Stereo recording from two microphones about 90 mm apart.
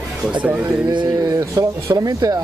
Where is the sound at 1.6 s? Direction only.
45° right (ahead or behind).